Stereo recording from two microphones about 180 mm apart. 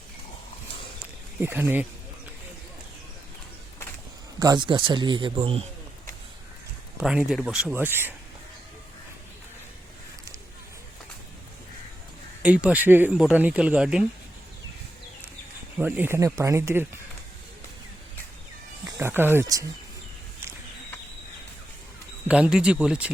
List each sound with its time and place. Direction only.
1.4 s speech: 10° right (ahead or behind)
4.4 s speech: 20° right (ahead or behind)
7.0 s speech: 5° right (ahead or behind)
12.4 s speech: 5° right (ahead or behind)
15.8 s speech: 10° right (ahead or behind)
18.9 s speech: 15° right (ahead or behind)
22.3 s speech: 5° right (ahead or behind)